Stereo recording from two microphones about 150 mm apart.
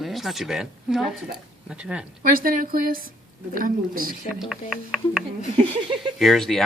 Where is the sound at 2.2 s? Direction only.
75° right (ahead or behind).